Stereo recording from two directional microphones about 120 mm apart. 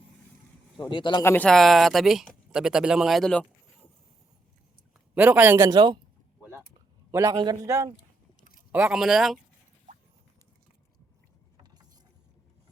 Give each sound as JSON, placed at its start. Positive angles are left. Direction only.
{"t": 0.8, "sound": "speech", "side_deg": 40}
{"t": 1.2, "sound": "speech", "side_deg": 20}
{"t": 1.5, "sound": "speech", "side_deg": 0}
{"t": 5.1, "sound": "a man's voice", "side_deg": -15}
{"t": 5.6, "sound": "a man's voice", "side_deg": -35}
{"t": 7.1, "sound": "a man's voice", "side_deg": -25}
{"t": 8.7, "sound": "speech", "side_deg": -5}